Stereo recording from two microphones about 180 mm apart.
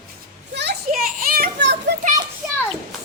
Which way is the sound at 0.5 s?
65° right (ahead or behind).